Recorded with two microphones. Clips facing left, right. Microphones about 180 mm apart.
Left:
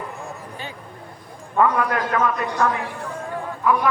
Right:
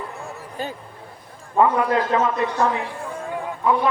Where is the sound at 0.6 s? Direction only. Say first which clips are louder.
Right 9 dB; 40° right (ahead or behind).